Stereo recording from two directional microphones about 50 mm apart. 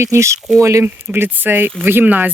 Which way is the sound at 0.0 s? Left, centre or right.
Right.